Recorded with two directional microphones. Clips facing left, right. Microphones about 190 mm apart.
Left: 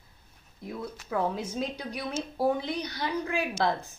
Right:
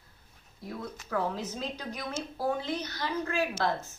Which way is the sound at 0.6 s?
15° left (ahead or behind).